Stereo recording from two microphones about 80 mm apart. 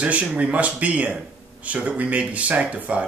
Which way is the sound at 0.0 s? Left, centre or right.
Centre.